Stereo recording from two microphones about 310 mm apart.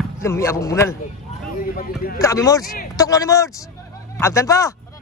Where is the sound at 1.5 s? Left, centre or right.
Left.